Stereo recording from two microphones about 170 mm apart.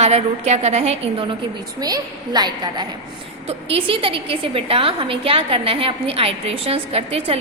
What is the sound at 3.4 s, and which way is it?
A woman's voice, 35° right (ahead or behind).